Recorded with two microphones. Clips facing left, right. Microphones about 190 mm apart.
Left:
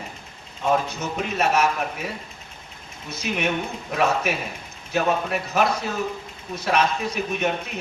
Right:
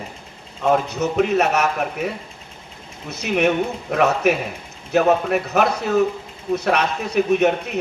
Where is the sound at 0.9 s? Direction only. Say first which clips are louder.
Right 10 dB; 70° right (ahead or behind).